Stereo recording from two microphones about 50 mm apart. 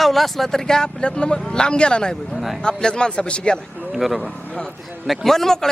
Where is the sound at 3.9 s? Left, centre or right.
Centre.